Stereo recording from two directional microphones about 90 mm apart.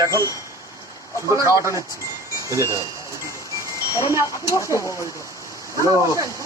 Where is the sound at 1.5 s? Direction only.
35° right (ahead or behind).